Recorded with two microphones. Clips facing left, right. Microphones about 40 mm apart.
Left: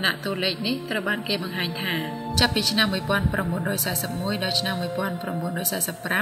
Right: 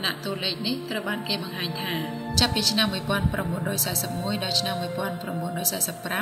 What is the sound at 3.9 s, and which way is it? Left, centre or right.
A woman's voice, centre.